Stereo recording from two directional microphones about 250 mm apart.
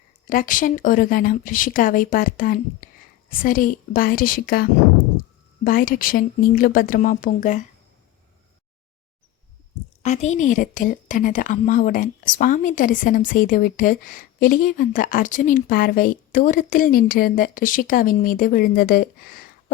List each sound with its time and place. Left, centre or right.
0.3 s a woman's voice: left
10.0 s a woman's voice: left